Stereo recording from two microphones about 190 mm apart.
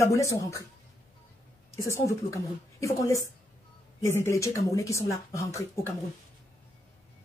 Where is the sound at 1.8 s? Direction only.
15° left (ahead or behind).